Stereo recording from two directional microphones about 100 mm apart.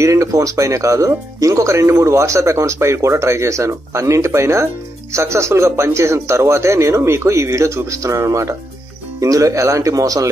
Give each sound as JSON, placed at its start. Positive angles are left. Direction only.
{"t": 0.0, "sound": "speech", "side_deg": -30}